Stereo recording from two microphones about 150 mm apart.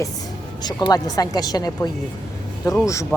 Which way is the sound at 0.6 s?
30° left (ahead or behind).